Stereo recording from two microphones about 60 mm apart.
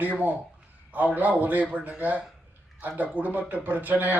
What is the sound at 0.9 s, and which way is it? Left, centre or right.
Speech, right.